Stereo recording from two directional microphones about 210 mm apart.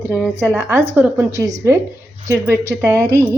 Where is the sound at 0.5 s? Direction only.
10° right (ahead or behind).